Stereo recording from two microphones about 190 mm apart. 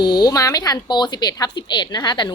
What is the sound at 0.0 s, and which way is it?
A woman's voice, 20° left (ahead or behind).